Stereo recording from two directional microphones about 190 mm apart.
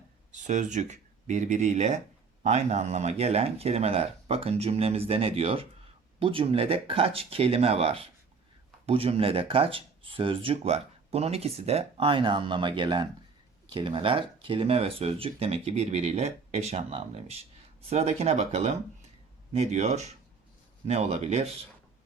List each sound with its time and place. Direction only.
0.4 s speech: 40° right (ahead or behind)